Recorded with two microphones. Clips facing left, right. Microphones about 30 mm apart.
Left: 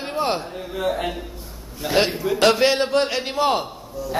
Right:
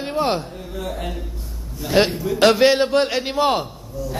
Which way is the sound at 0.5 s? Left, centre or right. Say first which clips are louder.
Left 5 dB; left.